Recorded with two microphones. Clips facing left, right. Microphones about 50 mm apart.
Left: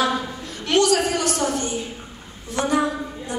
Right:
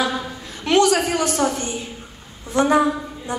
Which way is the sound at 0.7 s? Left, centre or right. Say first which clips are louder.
Right 2 dB; right.